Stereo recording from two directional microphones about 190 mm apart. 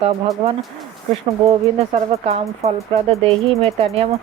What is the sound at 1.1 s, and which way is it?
Speech, 30° right (ahead or behind).